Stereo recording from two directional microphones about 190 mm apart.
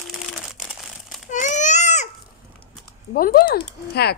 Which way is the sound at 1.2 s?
40° left (ahead or behind).